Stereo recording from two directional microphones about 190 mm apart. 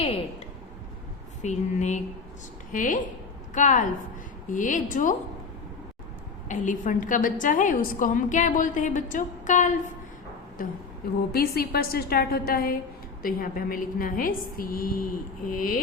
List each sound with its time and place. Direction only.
0.0 s a sound: 30° left (ahead or behind)
1.4 s a woman's voice: 35° left (ahead or behind)
6.5 s a woman's voice: 40° left (ahead or behind)
11.3 s a woman's voice: 55° left (ahead or behind)